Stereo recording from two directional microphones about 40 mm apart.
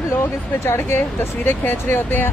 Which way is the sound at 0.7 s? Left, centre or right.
Left.